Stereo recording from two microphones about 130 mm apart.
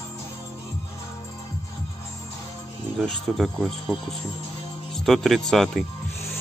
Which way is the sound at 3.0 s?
Centre (ahead or behind).